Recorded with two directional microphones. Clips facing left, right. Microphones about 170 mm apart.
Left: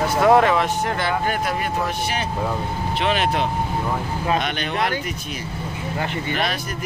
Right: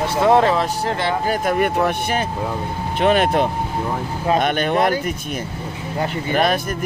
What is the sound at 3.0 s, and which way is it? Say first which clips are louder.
Speech: right 6 dB; 50° right (ahead or behind).